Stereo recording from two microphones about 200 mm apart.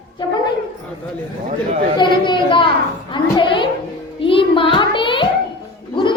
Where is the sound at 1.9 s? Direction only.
25° left (ahead or behind).